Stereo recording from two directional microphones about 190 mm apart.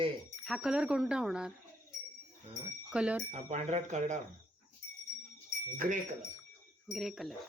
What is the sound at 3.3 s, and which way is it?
Speech, 35° right (ahead or behind).